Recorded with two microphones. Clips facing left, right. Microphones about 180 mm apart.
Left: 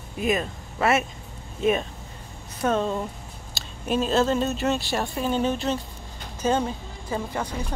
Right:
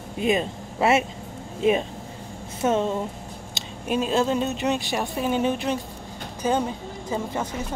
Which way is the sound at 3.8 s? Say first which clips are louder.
Even; 5° right (ahead or behind).